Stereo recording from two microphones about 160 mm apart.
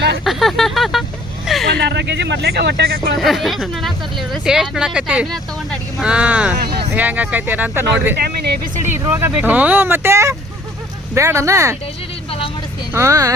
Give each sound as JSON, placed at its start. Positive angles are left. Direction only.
{"t": 0.3, "sound": "a sound", "side_deg": 0}
{"t": 1.6, "sound": "speech", "side_deg": -85}
{"t": 3.2, "sound": "speech", "side_deg": 0}
{"t": 6.6, "sound": "speech", "side_deg": -80}
{"t": 6.9, "sound": "speech", "side_deg": -10}
{"t": 8.1, "sound": "speech", "side_deg": -80}
{"t": 8.9, "sound": "speech", "side_deg": -15}
{"t": 12.9, "sound": "speech", "side_deg": -20}